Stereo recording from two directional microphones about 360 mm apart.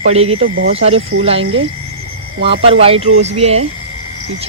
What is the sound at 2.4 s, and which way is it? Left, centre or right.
Speech, centre.